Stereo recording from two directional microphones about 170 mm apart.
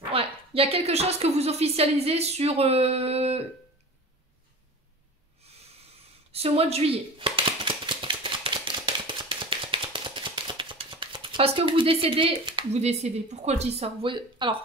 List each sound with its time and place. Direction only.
0.1 s a woman's voice: 35° right (ahead or behind)
5.4 s snort: 35° right (ahead or behind)
6.3 s a sound: 35° right (ahead or behind)